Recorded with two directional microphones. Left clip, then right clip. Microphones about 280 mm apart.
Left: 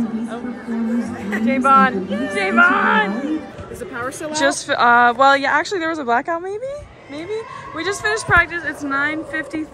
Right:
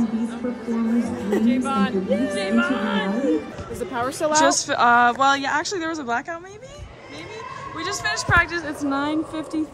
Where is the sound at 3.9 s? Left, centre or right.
Right.